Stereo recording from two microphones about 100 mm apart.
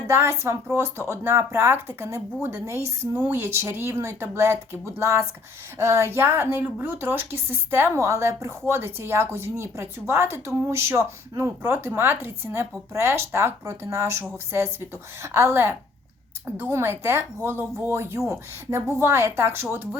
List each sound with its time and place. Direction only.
0.1 s a woman's voice: 25° right (ahead or behind)